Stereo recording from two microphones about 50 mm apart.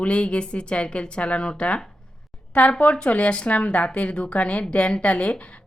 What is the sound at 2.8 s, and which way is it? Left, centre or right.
A woman's voice, left.